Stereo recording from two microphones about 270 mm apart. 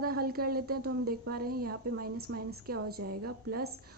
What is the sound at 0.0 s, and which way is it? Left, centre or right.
A woman's voice, right.